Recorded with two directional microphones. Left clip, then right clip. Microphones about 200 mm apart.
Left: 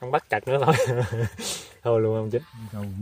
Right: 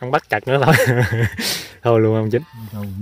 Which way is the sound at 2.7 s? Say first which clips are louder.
Right 4 dB; centre (ahead or behind).